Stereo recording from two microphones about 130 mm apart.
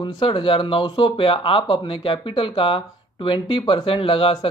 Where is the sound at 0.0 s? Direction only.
40° left (ahead or behind).